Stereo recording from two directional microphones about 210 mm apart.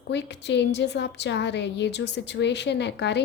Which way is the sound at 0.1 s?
55° left (ahead or behind).